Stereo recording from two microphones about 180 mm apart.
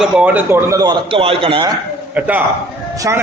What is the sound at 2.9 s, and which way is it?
Speech, 20° right (ahead or behind).